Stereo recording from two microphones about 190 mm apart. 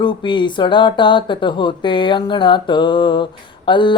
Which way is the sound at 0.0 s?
25° left (ahead or behind).